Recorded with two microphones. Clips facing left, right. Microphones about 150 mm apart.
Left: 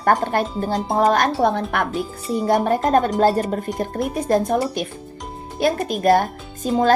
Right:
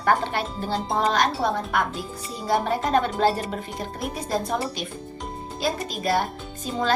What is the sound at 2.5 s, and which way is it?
Speech, 50° left (ahead or behind).